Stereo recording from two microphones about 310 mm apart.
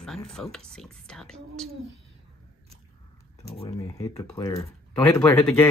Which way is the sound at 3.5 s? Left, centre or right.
Centre.